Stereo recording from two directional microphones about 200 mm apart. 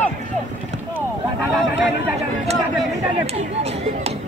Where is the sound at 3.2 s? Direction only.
30° right (ahead or behind).